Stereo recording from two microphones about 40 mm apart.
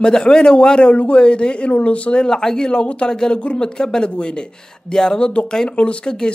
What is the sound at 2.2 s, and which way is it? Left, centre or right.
Speech, centre.